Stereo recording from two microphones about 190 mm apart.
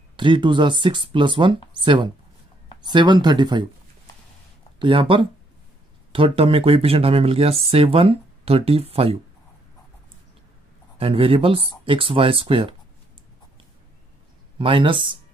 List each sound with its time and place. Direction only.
0.1 s speech: 25° right (ahead or behind)
2.9 s speech: 25° right (ahead or behind)
4.7 s speech: 25° right (ahead or behind)
11.0 s speech: 30° right (ahead or behind)
14.6 s speech: 25° right (ahead or behind)